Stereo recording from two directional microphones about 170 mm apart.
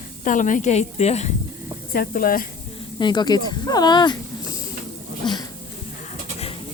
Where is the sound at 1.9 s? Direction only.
55° left (ahead or behind).